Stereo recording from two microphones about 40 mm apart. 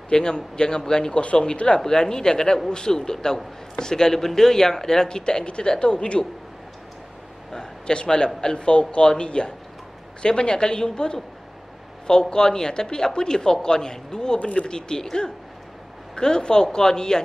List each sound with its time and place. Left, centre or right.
0.1 s speech: left
7.5 s a sound: left
8.4 s speech: left